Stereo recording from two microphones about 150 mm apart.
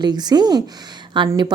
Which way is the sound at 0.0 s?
30° right (ahead or behind).